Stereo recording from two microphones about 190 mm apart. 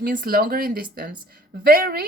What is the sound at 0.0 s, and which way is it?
A woman's voice, 50° right (ahead or behind).